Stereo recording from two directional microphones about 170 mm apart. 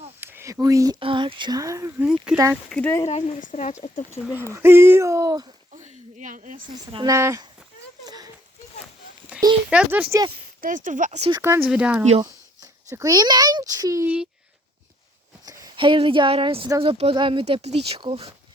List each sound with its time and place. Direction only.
0.2 s a sound: 15° right (ahead or behind)
0.9 s speech: 30° right (ahead or behind)
2.5 s speech: 5° left (ahead or behind)
3.1 s speech: 45° left (ahead or behind)
4.5 s speech: 15° right (ahead or behind)
5.7 s a sound: 50° right (ahead or behind)
6.9 s speech: 20° right (ahead or behind)
8.0 s a sound: 20° right (ahead or behind)
9.3 s a sound: 5° right (ahead or behind)
9.6 s speech: 5° right (ahead or behind)
10.6 s speech: 50° right (ahead or behind)
11.4 s speech: 10° right (ahead or behind)
12.9 s speech: 20° right (ahead or behind)
15.4 s a woman's voice: 25° right (ahead or behind)